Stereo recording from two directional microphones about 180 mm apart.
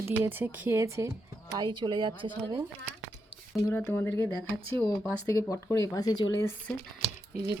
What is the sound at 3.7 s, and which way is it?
Speech, 10° left (ahead or behind).